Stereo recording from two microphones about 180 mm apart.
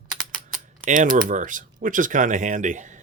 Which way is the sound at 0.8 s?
45° right (ahead or behind).